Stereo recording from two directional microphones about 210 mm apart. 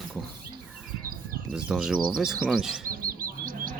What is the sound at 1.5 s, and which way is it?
Speech, 5° right (ahead or behind).